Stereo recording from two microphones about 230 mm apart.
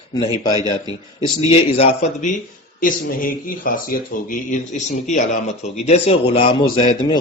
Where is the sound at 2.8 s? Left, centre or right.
Left.